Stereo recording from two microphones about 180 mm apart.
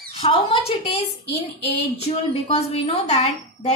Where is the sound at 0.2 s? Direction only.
35° left (ahead or behind).